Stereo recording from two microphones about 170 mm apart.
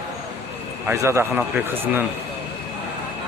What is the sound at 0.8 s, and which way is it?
A man's voice, 15° right (ahead or behind).